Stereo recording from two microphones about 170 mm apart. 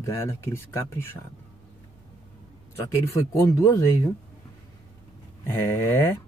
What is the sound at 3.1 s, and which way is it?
Speech, 20° left (ahead or behind).